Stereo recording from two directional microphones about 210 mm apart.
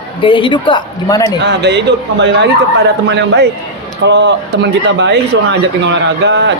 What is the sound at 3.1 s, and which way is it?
Speech, 55° right (ahead or behind).